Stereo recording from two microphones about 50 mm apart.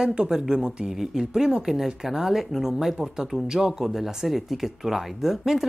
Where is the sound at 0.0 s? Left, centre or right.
Centre.